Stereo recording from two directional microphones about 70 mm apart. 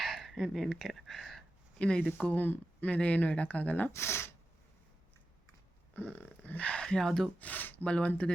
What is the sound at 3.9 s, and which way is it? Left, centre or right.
Speech, left.